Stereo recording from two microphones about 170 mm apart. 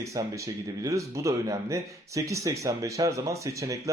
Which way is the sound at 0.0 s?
20° right (ahead or behind).